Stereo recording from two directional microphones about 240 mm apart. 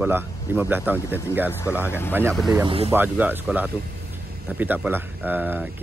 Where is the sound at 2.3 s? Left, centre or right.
Centre.